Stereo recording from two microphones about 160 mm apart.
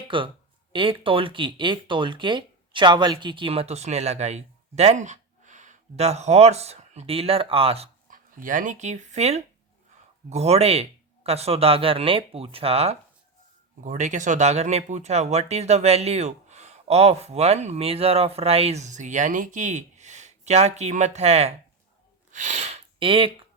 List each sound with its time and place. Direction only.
0.1 s speech: 30° right (ahead or behind)
8.1 s speech: 55° right (ahead or behind)
22.3 s a sound: 50° right (ahead or behind); by 23.3 s 35° right (ahead or behind)